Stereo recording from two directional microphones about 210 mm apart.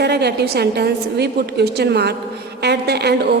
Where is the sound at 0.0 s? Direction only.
50° right (ahead or behind).